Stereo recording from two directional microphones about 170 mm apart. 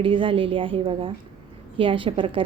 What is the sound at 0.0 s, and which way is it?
A woman's voice, 30° right (ahead or behind).